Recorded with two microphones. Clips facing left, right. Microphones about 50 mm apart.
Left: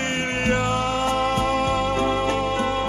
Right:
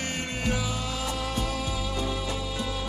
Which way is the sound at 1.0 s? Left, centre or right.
Left.